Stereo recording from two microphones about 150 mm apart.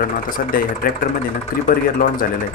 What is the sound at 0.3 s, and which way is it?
Speech, 70° left (ahead or behind).